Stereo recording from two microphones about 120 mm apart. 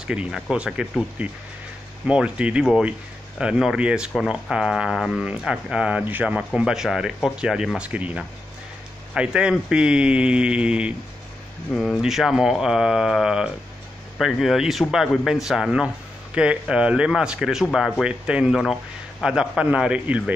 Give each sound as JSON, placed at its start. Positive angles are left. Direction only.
{"t": 0.0, "sound": "speech", "side_deg": -10}